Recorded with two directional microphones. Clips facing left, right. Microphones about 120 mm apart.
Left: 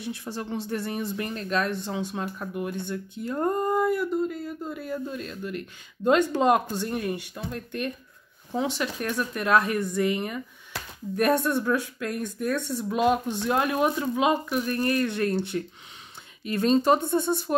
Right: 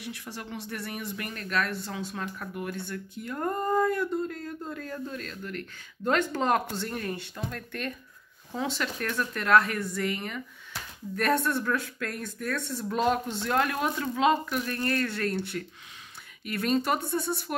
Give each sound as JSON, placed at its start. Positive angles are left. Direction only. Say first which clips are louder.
{"t": 0.0, "sound": "a woman's voice", "louder": "left 6 dB", "side_deg": 30}